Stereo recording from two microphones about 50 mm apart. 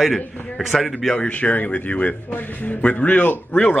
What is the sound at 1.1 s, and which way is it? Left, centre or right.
Speech, left.